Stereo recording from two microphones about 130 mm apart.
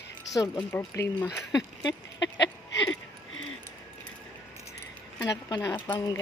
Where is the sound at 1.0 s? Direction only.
20° left (ahead or behind).